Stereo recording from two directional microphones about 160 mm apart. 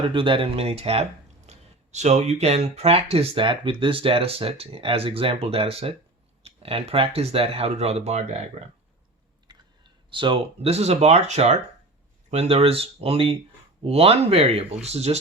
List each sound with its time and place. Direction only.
0.1 s speech: 30° right (ahead or behind)
10.1 s speech: 30° right (ahead or behind)